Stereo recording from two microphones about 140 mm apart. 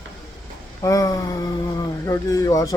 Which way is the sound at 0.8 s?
25° left (ahead or behind).